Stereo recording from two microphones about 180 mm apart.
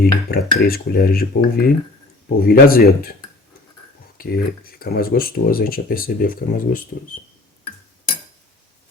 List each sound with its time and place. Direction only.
0.0 s dishes: 55° left (ahead or behind)
4.2 s speech: 55° left (ahead or behind)